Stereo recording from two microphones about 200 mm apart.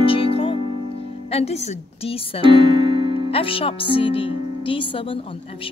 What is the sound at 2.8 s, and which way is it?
Music, 25° right (ahead or behind).